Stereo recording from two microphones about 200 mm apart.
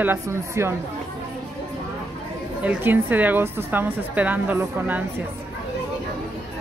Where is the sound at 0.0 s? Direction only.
10° right (ahead or behind).